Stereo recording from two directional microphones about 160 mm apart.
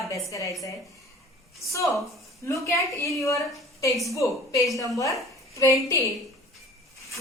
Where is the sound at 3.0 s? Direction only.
20° left (ahead or behind).